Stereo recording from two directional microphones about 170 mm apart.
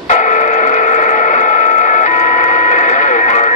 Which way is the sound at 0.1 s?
45° left (ahead or behind).